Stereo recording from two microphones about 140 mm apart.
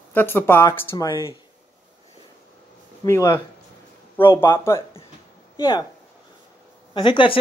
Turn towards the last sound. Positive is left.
turn(degrees=35)  # may be behind; listen again after turning